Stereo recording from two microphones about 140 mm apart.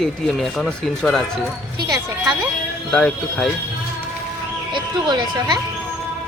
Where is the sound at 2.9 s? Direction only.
10° left (ahead or behind).